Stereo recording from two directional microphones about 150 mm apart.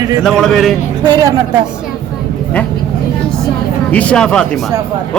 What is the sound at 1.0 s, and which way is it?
Speech, 30° right (ahead or behind).